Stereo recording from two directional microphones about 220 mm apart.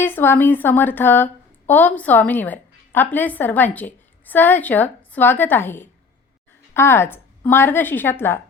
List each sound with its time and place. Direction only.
0.0 s a woman's voice: 10° left (ahead or behind)